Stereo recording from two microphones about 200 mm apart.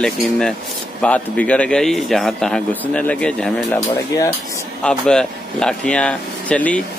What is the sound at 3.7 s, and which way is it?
Speech, 15° left (ahead or behind).